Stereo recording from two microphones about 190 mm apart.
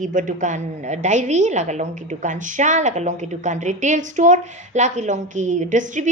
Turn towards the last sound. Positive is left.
turn(degrees=-40)  # may be behind; listen again after turning